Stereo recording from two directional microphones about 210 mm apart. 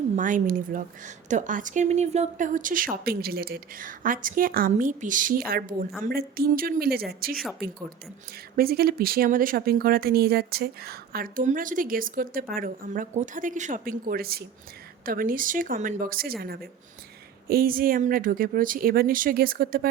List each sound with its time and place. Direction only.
0.2 s a woman's voice: 40° right (ahead or behind)
17.5 s speech: 45° right (ahead or behind)